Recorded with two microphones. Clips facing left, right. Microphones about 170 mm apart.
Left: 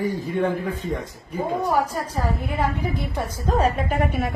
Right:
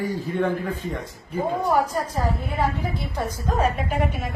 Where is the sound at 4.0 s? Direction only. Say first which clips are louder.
Left 3 dB; 60° left (ahead or behind).